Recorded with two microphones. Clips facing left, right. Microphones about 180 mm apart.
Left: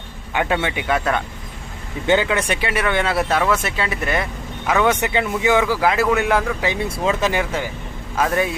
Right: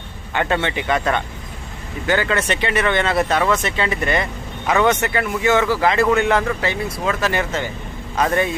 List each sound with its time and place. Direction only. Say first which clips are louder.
0.3 s speech: even; 5° left (ahead or behind)
2.0 s speech: left 1 dB; 15° left (ahead or behind)
4.9 s speech: left 1 dB; 15° left (ahead or behind)
6.8 s speech: left 2 dB; 25° left (ahead or behind); by 8.5 s 5° left (ahead or behind)